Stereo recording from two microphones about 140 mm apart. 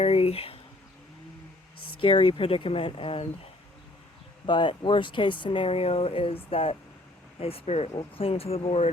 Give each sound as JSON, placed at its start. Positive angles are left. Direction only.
{"t": 0.0, "sound": "speech", "side_deg": 45}
{"t": 2.0, "sound": "speech", "side_deg": 40}